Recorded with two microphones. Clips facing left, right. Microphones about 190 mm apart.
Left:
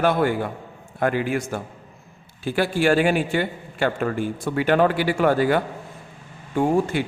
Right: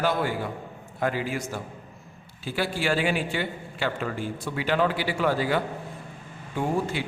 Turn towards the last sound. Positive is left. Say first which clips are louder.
# left 6 dB
turn(degrees=55)  # may be behind; listen again after turning